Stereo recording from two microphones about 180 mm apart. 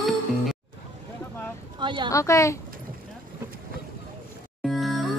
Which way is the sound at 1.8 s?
25° right (ahead or behind).